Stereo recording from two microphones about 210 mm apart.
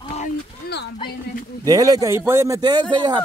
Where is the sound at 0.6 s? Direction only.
45° left (ahead or behind).